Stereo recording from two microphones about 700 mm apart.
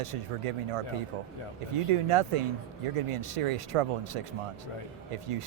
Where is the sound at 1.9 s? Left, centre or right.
Right.